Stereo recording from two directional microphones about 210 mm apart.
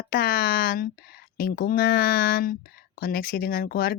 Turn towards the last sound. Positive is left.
turn(degrees=45)  # may be behind; listen again after turning